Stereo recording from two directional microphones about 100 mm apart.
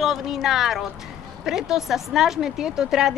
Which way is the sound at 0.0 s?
5° right (ahead or behind).